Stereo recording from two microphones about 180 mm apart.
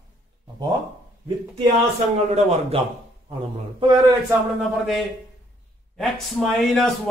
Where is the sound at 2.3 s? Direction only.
35° right (ahead or behind).